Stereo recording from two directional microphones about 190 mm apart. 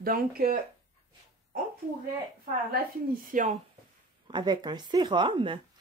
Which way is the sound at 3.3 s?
45° right (ahead or behind).